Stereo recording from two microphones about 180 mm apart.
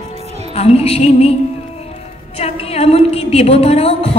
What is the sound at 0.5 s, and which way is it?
Speech, 35° left (ahead or behind).